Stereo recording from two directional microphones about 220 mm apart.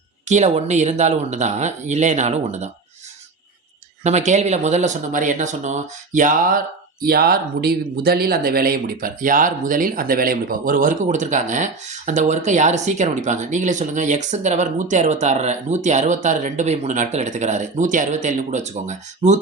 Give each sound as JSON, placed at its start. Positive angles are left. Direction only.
{"t": 0.3, "sound": "speech", "side_deg": -30}
{"t": 4.0, "sound": "speech", "side_deg": -30}